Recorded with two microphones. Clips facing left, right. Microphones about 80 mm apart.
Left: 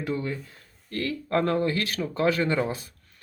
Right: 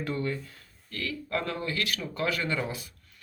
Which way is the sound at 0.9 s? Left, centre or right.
Left.